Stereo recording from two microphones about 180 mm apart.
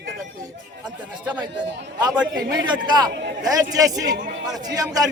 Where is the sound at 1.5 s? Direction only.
75° right (ahead or behind).